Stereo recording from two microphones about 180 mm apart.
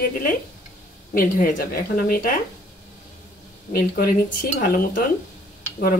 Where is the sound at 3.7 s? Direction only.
55° left (ahead or behind).